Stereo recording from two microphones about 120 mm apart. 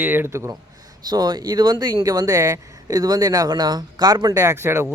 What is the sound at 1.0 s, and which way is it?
Speech, 35° right (ahead or behind).